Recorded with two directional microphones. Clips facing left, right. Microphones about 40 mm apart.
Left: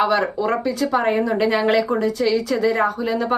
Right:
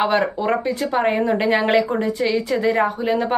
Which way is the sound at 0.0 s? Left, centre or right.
Right.